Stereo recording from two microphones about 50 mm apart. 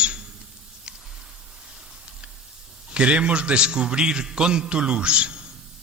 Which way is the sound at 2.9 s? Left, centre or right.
Right.